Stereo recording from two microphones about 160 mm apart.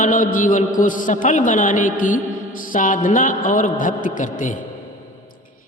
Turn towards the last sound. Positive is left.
turn(degrees=50)  # may be behind; listen again after turning